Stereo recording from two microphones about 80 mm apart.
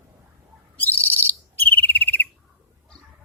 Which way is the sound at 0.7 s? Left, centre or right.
Left.